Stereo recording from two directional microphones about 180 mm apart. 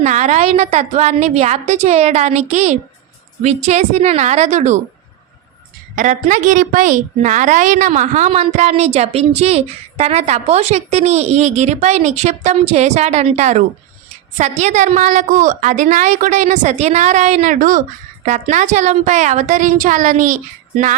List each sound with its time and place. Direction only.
0.0 s a woman's voice: 40° right (ahead or behind)
6.0 s a woman's voice: 45° right (ahead or behind)